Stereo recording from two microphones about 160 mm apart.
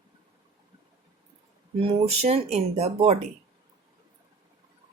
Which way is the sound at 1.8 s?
40° right (ahead or behind).